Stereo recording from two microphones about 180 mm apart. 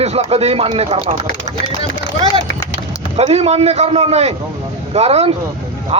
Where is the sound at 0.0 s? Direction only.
35° right (ahead or behind).